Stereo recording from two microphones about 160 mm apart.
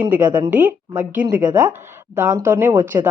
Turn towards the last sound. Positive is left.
turn(degrees=-10)  # may be behind; listen again after turning